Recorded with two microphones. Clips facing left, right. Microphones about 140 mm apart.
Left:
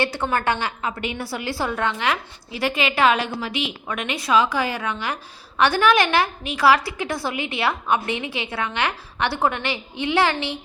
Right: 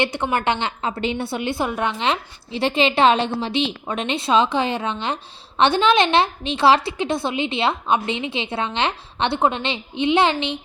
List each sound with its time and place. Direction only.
0.0 s a woman's voice: 20° right (ahead or behind)